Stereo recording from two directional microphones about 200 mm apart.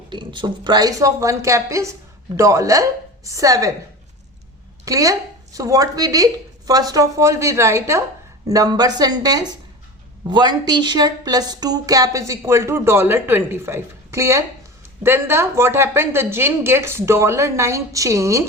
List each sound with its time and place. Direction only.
0.1 s a woman's voice: 25° right (ahead or behind)
4.9 s a woman's voice: 15° right (ahead or behind)